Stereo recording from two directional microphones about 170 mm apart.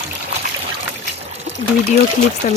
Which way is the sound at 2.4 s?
40° left (ahead or behind).